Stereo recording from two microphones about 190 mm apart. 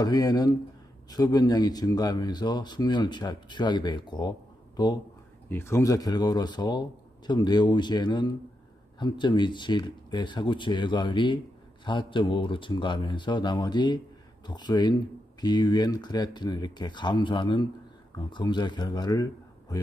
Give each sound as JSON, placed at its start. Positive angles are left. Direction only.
{"t": 0.0, "sound": "speech", "side_deg": 20}